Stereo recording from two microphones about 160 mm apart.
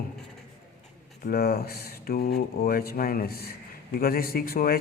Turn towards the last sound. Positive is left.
turn(degrees=70)  # may be behind; listen again after turning